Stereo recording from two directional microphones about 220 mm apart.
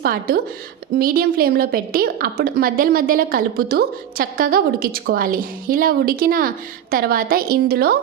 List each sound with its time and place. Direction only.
0.0 s a woman's voice: 40° right (ahead or behind)